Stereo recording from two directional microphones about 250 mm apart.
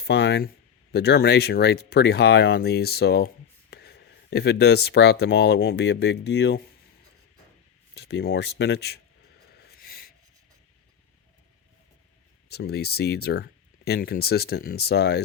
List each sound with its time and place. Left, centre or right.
0.1 s speech: left
7.9 s speech: left
9.6 s a sound: left
12.5 s speech: left